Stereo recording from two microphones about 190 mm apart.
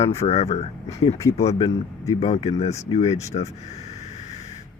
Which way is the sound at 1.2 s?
15° left (ahead or behind).